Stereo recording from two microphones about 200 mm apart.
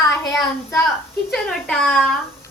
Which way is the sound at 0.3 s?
Centre (ahead or behind).